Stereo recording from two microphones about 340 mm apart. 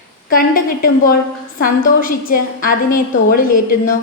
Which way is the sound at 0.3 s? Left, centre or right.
Left.